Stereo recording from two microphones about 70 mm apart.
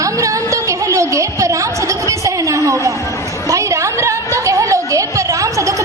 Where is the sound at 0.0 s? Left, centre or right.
Right.